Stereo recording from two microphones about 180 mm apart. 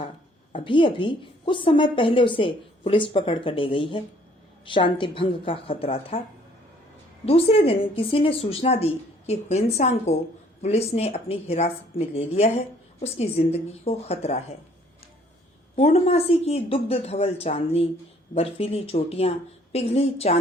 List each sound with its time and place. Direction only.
0.5 s a woman's voice: 30° left (ahead or behind)
7.3 s a woman's voice: 35° left (ahead or behind)
15.7 s a woman's voice: 35° left (ahead or behind)